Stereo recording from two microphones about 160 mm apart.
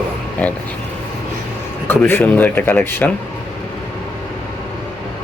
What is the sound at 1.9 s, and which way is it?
A man's voice, 15° left (ahead or behind).